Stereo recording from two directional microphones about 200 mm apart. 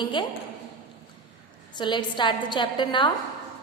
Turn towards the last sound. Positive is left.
turn(degrees=25)  # may be behind; listen again after turning